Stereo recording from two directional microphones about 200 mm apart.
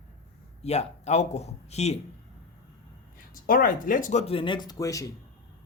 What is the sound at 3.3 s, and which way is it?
Speech, 45° left (ahead or behind).